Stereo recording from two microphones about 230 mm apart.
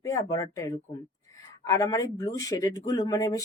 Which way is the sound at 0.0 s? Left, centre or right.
Centre.